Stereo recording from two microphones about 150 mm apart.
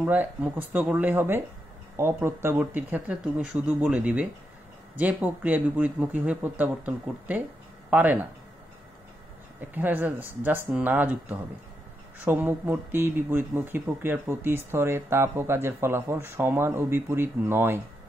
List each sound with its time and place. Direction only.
0.0 s speech: 10° right (ahead or behind)
9.6 s speech: 10° right (ahead or behind)